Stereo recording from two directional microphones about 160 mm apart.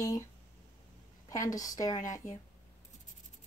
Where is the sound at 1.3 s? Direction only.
20° left (ahead or behind).